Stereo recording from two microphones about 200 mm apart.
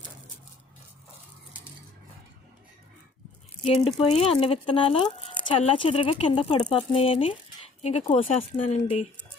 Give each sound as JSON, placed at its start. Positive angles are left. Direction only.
{"t": 3.7, "sound": "speech", "side_deg": 25}